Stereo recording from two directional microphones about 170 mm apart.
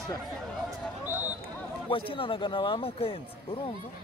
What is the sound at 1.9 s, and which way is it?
Speech, 30° left (ahead or behind).